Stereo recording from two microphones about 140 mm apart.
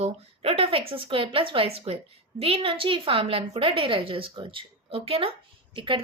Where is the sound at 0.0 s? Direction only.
45° right (ahead or behind).